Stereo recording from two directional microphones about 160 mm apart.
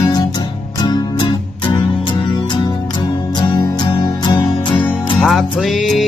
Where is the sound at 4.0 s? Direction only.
25° left (ahead or behind).